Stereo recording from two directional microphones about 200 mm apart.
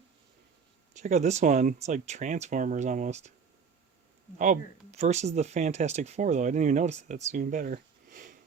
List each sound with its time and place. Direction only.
0.9 s speech: 35° right (ahead or behind)
4.4 s speech: 35° right (ahead or behind)